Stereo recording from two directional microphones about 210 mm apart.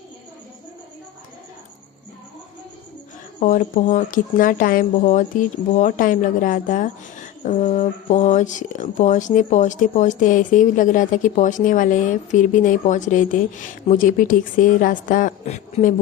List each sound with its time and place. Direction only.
3.4 s speech: 40° left (ahead or behind)